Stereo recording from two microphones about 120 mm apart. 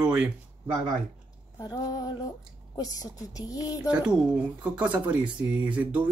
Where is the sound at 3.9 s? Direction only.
10° right (ahead or behind).